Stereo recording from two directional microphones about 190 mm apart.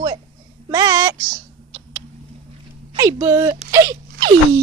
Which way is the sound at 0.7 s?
20° right (ahead or behind).